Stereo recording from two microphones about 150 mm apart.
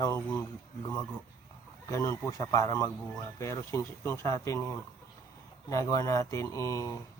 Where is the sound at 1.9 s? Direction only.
20° left (ahead or behind).